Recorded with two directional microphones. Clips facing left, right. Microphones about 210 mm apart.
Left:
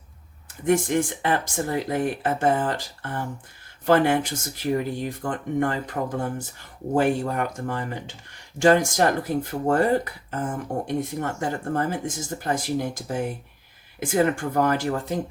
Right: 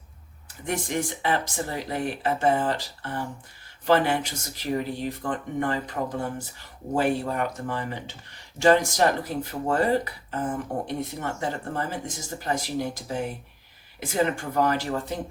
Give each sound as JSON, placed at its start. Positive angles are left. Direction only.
{"t": 0.7, "sound": "speech", "side_deg": 50}